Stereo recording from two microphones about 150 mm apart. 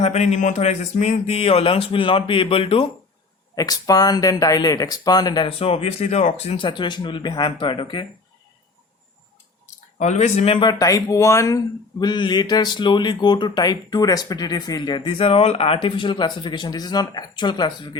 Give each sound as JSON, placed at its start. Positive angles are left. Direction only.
{"t": 0.0, "sound": "speech", "side_deg": 50}
{"t": 3.5, "sound": "speech", "side_deg": 25}
{"t": 10.0, "sound": "speech", "side_deg": 50}